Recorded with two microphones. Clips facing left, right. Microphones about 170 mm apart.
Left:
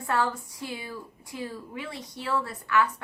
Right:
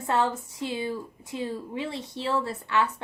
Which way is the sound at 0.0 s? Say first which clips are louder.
Right 2 dB; 25° right (ahead or behind).